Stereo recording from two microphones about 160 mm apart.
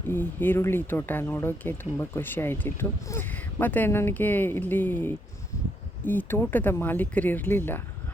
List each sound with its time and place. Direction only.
0.1 s speech: 10° left (ahead or behind)